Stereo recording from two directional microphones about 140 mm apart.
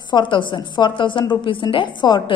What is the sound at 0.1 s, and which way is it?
A woman's voice, 35° left (ahead or behind).